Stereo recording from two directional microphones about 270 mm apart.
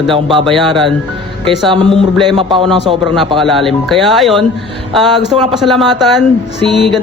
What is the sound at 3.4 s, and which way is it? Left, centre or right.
Speech, centre.